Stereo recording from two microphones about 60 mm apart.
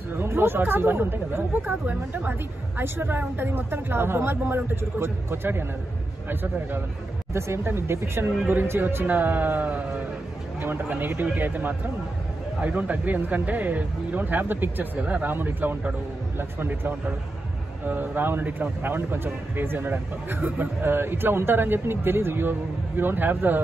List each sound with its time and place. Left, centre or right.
0.1 s a man's voice: right
7.3 s a man's voice: right